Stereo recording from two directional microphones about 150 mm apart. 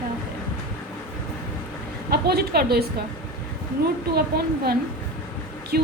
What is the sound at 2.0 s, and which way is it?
Speech, 90° right.